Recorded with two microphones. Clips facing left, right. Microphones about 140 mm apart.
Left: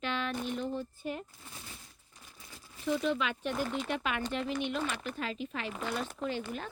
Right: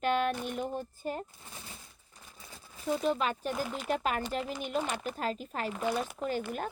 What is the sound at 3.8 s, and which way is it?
Speech, 40° right (ahead or behind).